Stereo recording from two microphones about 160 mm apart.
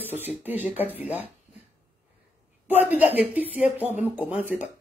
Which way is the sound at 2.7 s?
10° right (ahead or behind).